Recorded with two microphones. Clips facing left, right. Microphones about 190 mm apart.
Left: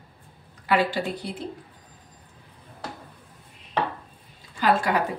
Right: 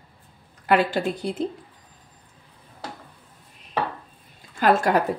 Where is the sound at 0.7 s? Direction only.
50° right (ahead or behind).